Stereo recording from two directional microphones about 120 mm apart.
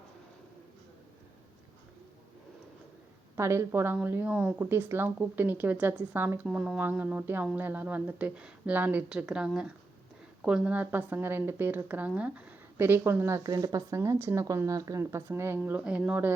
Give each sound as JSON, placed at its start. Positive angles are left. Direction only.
{"t": 3.3, "sound": "a woman's voice", "side_deg": -20}